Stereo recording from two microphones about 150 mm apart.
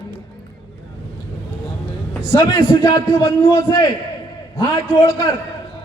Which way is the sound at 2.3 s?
25° left (ahead or behind).